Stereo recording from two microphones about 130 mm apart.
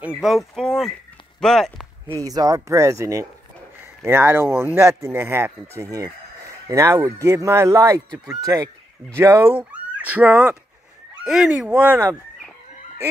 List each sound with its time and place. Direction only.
0.0 s speech: 5° right (ahead or behind)
2.0 s speech: 25° right (ahead or behind); by 11.5 s centre (ahead or behind)
11.6 s speech: 15° right (ahead or behind)